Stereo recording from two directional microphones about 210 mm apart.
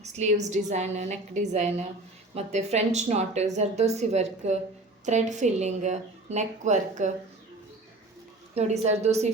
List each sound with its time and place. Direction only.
0.0 s speech: 35° right (ahead or behind)
8.5 s speech: 30° right (ahead or behind)